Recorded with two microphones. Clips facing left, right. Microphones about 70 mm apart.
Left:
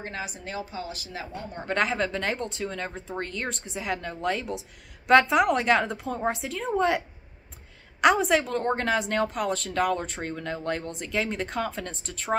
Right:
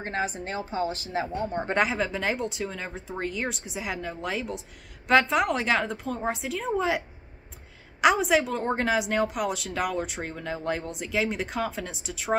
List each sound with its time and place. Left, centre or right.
0.0 s a woman's voice: right
1.8 s speech: centre
8.0 s speech: centre